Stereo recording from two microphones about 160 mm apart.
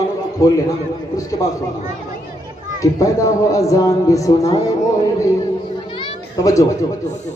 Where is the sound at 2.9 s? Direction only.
20° left (ahead or behind).